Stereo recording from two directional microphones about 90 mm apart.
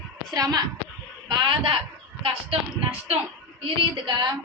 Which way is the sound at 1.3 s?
60° right (ahead or behind).